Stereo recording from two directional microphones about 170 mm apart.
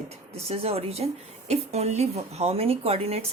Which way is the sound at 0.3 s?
35° right (ahead or behind).